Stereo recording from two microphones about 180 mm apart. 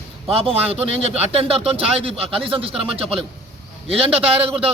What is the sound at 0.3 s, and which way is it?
Speech, 30° right (ahead or behind).